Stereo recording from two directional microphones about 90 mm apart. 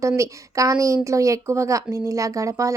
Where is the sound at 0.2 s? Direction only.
35° right (ahead or behind).